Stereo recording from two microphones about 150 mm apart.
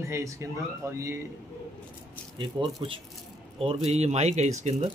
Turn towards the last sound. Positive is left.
turn(degrees=-45)  # may be behind; listen again after turning